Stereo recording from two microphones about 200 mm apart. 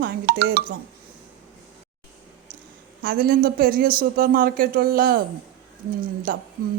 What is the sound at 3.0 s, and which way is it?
Speech, 45° right (ahead or behind).